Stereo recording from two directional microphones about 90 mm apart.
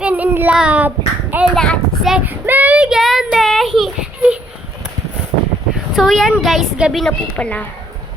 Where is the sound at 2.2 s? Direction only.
20° right (ahead or behind); by 3.2 s 5° right (ahead or behind).